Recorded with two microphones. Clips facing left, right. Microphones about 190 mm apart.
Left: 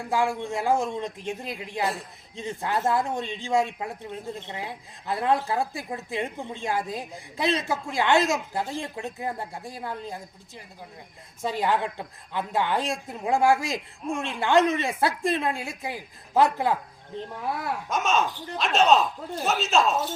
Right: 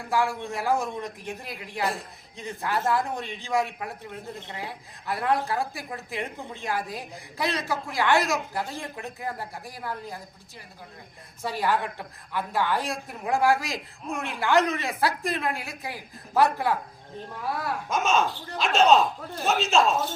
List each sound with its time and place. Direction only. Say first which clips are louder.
0.1 s a woman's voice: left 1 dB; 25° left (ahead or behind)
11.4 s a woman's voice: left 1 dB; 20° left (ahead or behind)
17.8 s a man's voice: right 1 dB; centre (ahead or behind)